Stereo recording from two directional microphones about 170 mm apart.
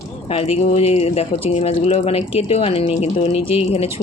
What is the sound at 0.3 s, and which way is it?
Speech, 35° left (ahead or behind).